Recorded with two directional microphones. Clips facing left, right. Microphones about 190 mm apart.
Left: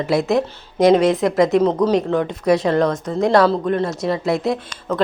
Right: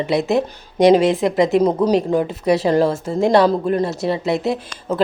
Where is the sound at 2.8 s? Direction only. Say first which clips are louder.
Right 1 dB; 25° right (ahead or behind).